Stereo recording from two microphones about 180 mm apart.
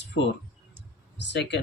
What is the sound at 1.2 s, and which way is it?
Speech, 70° left (ahead or behind).